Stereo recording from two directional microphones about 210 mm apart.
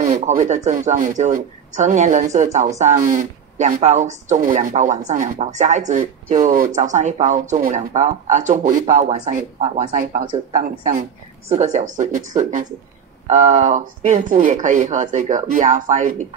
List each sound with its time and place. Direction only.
0.0 s speech: 35° right (ahead or behind)